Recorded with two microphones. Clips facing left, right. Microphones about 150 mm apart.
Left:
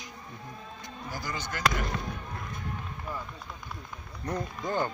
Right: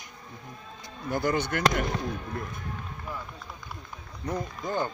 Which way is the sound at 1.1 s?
60° right (ahead or behind).